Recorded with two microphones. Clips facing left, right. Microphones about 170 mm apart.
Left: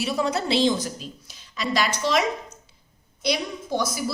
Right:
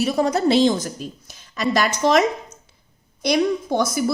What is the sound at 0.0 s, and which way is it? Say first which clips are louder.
Speech: right 6 dB; 45° right (ahead or behind).